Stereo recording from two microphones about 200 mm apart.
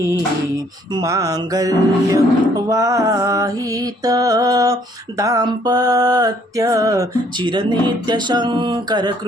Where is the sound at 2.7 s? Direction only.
15° right (ahead or behind).